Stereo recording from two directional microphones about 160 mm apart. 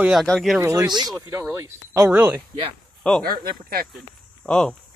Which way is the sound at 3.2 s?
70° right (ahead or behind).